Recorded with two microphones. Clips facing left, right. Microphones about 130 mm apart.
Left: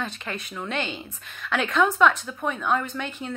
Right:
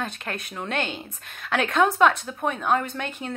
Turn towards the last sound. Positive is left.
turn(degrees=-55)  # may be behind; listen again after turning